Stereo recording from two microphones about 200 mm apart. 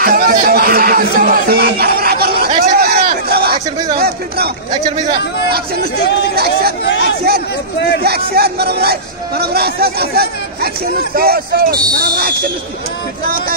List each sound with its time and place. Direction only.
0.0 s a sound: 45° right (ahead or behind)
3.9 s speech: 50° right (ahead or behind)
6.3 s speech: 50° right (ahead or behind)
6.8 s speech: 65° left (ahead or behind)
8.0 s speech: 50° right (ahead or behind)